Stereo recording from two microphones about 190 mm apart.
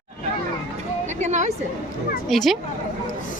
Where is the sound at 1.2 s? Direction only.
40° right (ahead or behind).